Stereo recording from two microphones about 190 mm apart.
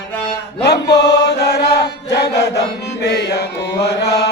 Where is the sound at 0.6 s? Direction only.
60° left (ahead or behind).